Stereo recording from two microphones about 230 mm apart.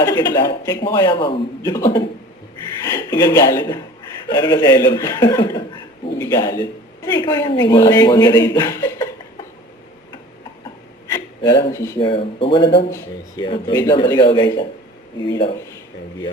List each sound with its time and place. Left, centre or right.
0.2 s speech: centre
11.1 s speech: centre